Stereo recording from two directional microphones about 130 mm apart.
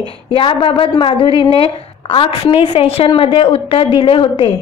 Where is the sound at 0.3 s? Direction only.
40° left (ahead or behind).